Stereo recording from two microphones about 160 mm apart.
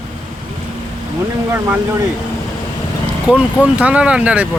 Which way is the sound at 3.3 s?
10° right (ahead or behind).